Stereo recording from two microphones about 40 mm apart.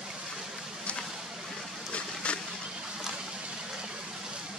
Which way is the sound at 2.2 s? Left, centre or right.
Left.